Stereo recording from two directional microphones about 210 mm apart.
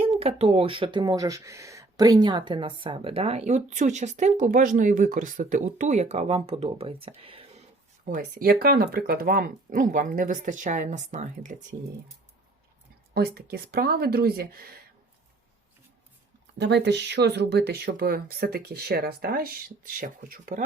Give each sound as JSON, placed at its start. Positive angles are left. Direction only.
{"t": 0.0, "sound": "speech", "side_deg": -30}
{"t": 7.2, "sound": "whispering", "side_deg": -25}
{"t": 8.1, "sound": "speech", "side_deg": -45}
{"t": 13.1, "sound": "speech", "side_deg": -50}
{"t": 16.6, "sound": "speech", "side_deg": -55}